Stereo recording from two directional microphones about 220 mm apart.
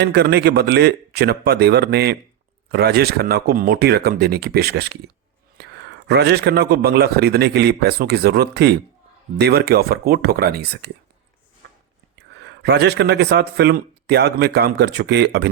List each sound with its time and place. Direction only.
0.0 s a man's voice: 50° right (ahead or behind)
12.3 s a man's voice: 50° right (ahead or behind)